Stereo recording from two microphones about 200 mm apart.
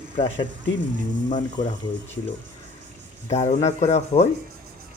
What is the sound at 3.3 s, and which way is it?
Speech, 35° left (ahead or behind).